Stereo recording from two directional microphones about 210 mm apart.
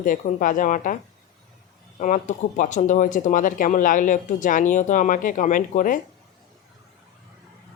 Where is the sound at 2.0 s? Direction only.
35° left (ahead or behind).